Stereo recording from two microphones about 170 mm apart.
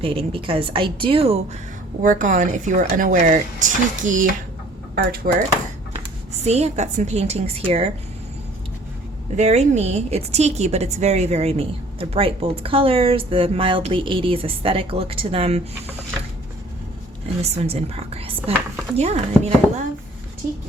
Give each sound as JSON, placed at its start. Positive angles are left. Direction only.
{"t": 0.0, "sound": "a woman's voice", "side_deg": -30}
{"t": 2.0, "sound": "speech", "side_deg": -50}
{"t": 5.0, "sound": "speech", "side_deg": -60}
{"t": 6.4, "sound": "a woman's voice", "side_deg": -40}
{"t": 9.3, "sound": "a woman's voice", "side_deg": -40}
{"t": 17.5, "sound": "a woman's voice", "side_deg": -40}
{"t": 20.4, "sound": "speech", "side_deg": -50}